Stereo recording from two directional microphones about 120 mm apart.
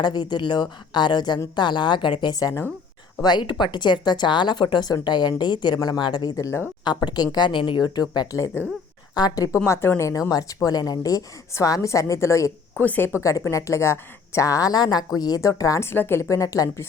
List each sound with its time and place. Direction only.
0.0 s speech: 40° left (ahead or behind)
12.8 s speech: 15° left (ahead or behind)
13.1 s speech: 25° left (ahead or behind)